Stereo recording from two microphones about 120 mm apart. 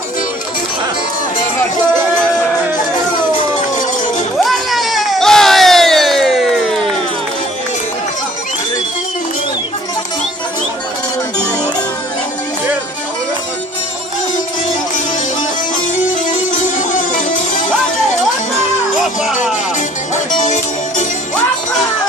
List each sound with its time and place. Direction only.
4.4 s a sound: centre (ahead or behind)
16.1 s music: 90° left
18.9 s music: centre (ahead or behind)
20.3 s music: 85° left